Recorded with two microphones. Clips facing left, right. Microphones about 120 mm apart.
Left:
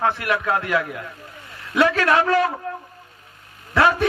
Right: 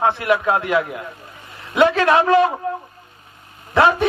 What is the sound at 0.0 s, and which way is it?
A man's voice, 20° right (ahead or behind).